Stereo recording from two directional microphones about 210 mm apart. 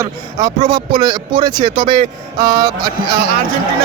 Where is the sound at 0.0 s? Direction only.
15° right (ahead or behind).